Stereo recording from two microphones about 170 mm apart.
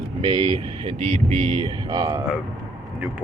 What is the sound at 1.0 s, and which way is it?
Speech, 45° right (ahead or behind).